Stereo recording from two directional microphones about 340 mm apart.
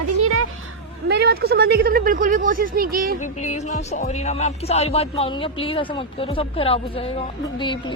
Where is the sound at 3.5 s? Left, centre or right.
Centre.